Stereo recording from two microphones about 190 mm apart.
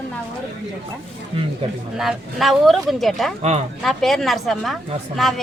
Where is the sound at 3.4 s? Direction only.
35° right (ahead or behind).